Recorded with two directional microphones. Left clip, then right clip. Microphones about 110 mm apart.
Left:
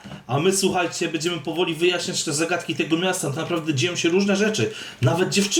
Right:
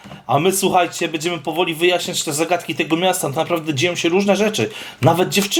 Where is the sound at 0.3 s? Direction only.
30° right (ahead or behind).